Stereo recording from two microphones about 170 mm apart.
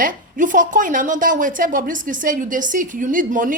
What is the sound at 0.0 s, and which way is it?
A woman's voice, 50° right (ahead or behind).